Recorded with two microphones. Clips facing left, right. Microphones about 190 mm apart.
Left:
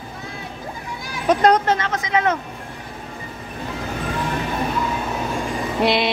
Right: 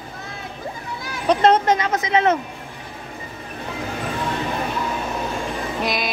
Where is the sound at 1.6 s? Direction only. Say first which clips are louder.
Right 2 dB; 15° right (ahead or behind).